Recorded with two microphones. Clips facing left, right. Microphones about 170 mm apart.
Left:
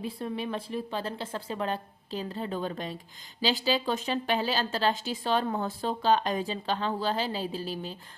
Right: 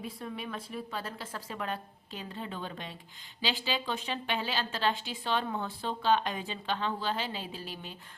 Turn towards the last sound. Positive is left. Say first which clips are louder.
# left 8 dB
turn(degrees=35)  # may be behind; listen again after turning